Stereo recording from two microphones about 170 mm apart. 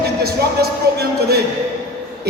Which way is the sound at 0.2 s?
65° right (ahead or behind).